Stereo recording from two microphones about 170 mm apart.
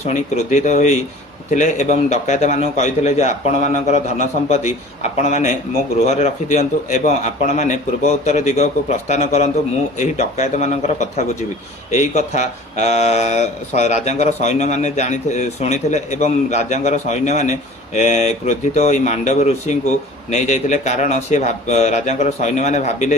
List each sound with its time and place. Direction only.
0.0 s a man's voice: 45° left (ahead or behind)